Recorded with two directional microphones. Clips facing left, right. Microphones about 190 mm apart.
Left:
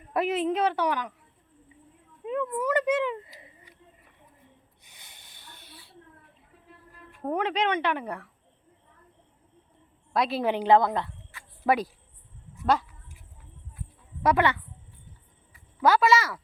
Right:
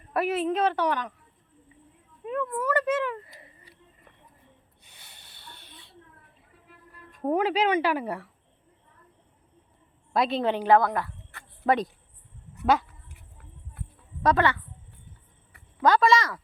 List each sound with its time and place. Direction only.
0.1 s a woman's voice: 15° left (ahead or behind)
2.2 s a woman's voice: 20° left (ahead or behind)
3.4 s a sound: 15° left (ahead or behind)
4.8 s snort: 10° left (ahead or behind)
7.2 s speech: 5° right (ahead or behind)
10.1 s a woman's voice: centre (ahead or behind)
10.5 s a woman's voice: 15° left (ahead or behind)
11.6 s a woman's voice: 5° left (ahead or behind)
13.8 s a sound: 65° right (ahead or behind)
14.2 s a woman's voice: 10° left (ahead or behind)
15.8 s a woman's voice: 5° left (ahead or behind)